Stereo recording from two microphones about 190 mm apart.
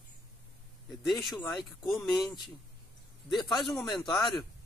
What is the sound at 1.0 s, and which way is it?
Speech, centre (ahead or behind).